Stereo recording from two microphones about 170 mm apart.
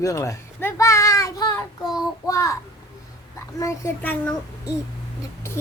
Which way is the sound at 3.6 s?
15° left (ahead or behind).